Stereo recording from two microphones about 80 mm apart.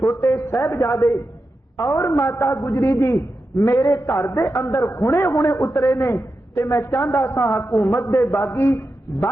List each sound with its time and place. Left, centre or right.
0.0 s a man's voice: left